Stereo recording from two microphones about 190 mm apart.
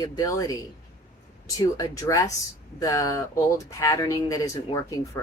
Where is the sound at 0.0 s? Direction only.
20° left (ahead or behind).